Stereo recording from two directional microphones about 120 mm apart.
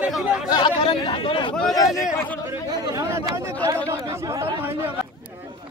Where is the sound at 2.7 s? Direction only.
30° right (ahead or behind).